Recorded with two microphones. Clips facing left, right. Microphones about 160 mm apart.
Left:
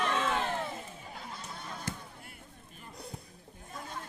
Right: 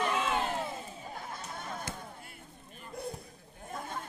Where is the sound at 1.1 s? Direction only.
50° right (ahead or behind).